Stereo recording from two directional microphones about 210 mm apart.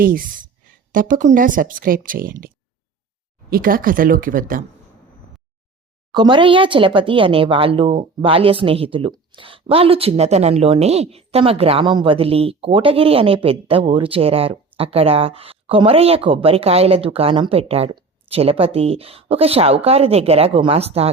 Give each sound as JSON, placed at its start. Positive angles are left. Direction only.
{"t": 0.0, "sound": "speech", "side_deg": -40}
{"t": 3.5, "sound": "speech", "side_deg": -45}
{"t": 6.1, "sound": "a woman's voice", "side_deg": -20}